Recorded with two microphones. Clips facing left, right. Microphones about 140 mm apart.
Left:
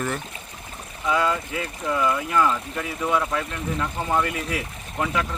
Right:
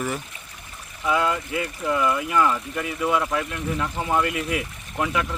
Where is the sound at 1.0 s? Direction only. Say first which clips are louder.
Even; 5° right (ahead or behind).